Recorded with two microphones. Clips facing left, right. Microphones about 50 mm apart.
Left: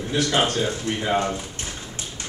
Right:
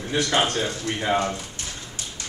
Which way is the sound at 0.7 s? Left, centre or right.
Centre.